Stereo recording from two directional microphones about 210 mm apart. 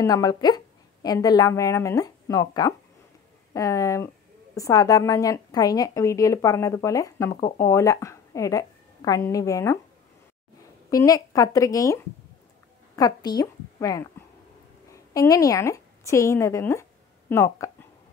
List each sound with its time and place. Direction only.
0.0 s a woman's voice: 15° left (ahead or behind)
10.9 s a woman's voice: 15° left (ahead or behind)